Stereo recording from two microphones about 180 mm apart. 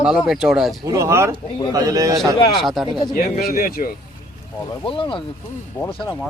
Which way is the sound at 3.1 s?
55° left (ahead or behind).